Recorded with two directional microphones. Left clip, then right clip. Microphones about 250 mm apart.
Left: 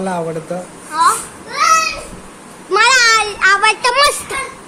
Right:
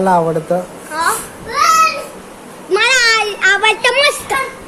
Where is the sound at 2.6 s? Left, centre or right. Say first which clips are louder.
Left 1 dB; centre.